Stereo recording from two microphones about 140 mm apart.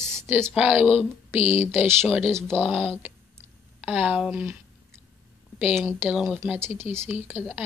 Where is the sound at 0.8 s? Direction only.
45° left (ahead or behind).